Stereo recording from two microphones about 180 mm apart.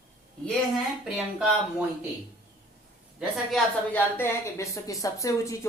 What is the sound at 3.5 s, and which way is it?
Speech, 10° left (ahead or behind).